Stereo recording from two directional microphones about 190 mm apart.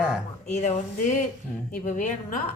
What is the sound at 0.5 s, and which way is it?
A woman's voice, 35° left (ahead or behind).